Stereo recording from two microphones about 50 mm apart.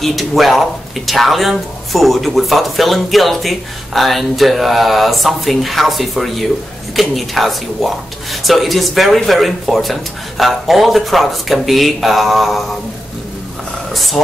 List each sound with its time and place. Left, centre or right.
0.0 s speech: centre
13.9 s speech: centre